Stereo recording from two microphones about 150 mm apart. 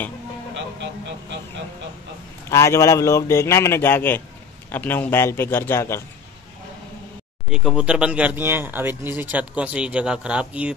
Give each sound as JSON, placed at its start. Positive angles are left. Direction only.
{"t": 2.5, "sound": "a man's voice", "side_deg": 20}
{"t": 7.4, "sound": "speech", "side_deg": -5}